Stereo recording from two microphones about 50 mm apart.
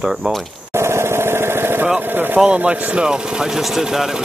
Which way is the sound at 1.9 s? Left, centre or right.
Right.